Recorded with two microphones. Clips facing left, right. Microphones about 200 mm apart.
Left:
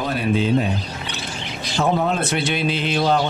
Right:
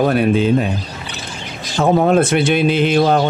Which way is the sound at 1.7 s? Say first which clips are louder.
Right 7 dB; 50° right (ahead or behind).